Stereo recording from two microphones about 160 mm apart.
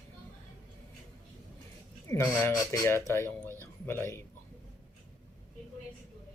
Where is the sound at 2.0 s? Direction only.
15° left (ahead or behind).